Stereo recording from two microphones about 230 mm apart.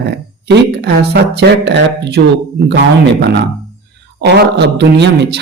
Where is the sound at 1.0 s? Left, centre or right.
Right.